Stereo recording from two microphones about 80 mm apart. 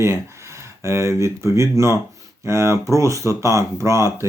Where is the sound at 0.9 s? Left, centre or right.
Right.